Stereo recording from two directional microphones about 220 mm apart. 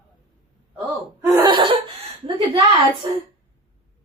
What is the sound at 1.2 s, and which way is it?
Laughter, 20° right (ahead or behind).